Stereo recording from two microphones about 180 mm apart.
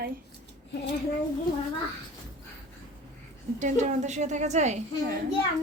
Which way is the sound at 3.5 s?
40° right (ahead or behind).